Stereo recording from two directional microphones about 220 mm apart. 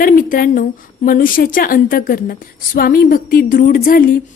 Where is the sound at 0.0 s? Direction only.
40° left (ahead or behind).